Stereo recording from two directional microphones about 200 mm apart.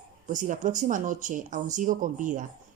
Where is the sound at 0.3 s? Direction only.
40° right (ahead or behind).